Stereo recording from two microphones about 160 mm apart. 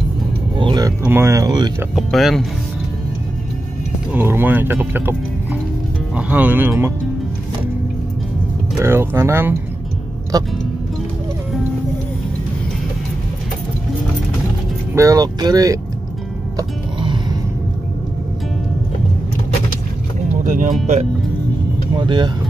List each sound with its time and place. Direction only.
0.6 s vehicle: 25° right (ahead or behind)
1.0 s speech: 15° right (ahead or behind)
2.0 s speech: centre (ahead or behind)
4.1 s speech: 15° right (ahead or behind)
8.7 s speech: 15° right (ahead or behind)
15.0 s speech: 20° right (ahead or behind)
16.5 s music: 30° right (ahead or behind)
20.4 s speech: 55° right (ahead or behind)
21.9 s speech: 30° right (ahead or behind)